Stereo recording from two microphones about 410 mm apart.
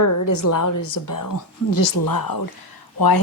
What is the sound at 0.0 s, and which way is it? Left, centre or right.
Speech, left.